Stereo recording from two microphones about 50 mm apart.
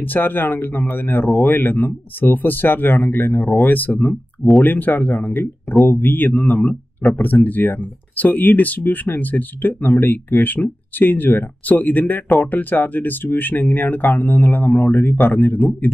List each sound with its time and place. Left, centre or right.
0.0 s speech: left